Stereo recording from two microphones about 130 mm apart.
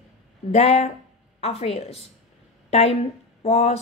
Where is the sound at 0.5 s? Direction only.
55° left (ahead or behind).